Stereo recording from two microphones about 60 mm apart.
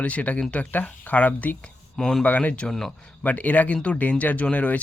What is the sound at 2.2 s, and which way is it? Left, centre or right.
Speech, left.